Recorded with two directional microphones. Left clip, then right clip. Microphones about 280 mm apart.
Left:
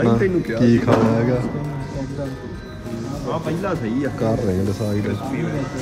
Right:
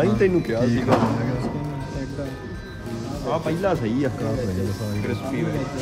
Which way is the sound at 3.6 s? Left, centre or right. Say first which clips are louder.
Right 1 dB; right.